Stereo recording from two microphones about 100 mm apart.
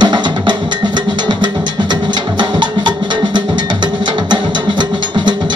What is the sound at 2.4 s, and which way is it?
Music, 50° right (ahead or behind).